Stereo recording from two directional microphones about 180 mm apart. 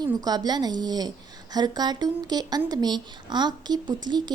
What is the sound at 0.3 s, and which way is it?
A woman's voice, 20° right (ahead or behind).